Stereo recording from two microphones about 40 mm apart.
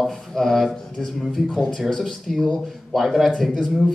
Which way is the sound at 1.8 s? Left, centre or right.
Centre.